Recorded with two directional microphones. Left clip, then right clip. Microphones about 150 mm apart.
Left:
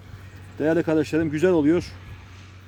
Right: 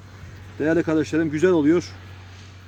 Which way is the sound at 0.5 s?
20° left (ahead or behind).